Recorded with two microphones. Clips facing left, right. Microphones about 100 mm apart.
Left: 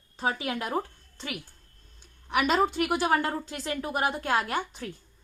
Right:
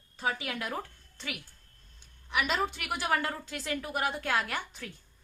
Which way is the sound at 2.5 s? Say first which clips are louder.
Left 8 dB; 35° left (ahead or behind).